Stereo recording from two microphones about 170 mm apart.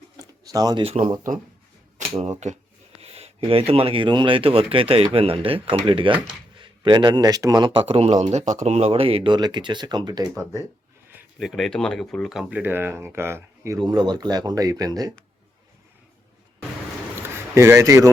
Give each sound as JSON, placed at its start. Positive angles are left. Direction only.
{"t": 0.2, "sound": "a sound", "side_deg": -20}
{"t": 2.0, "sound": "a sound", "side_deg": -40}
{"t": 3.0, "sound": "a man's voice", "side_deg": -35}
{"t": 11.1, "sound": "speech", "side_deg": 0}
{"t": 13.8, "sound": "a man's voice", "side_deg": -25}
{"t": 17.5, "sound": "speech", "side_deg": -15}